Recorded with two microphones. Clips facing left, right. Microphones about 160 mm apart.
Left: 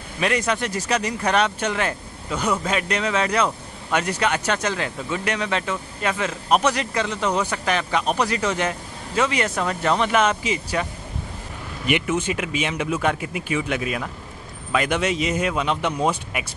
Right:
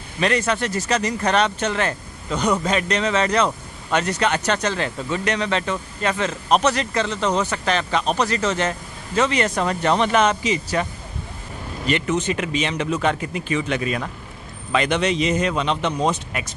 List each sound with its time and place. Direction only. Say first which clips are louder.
0.2 s speech: right 2 dB; 10° left (ahead or behind)
9.6 s speech: right 1 dB; centre (ahead or behind)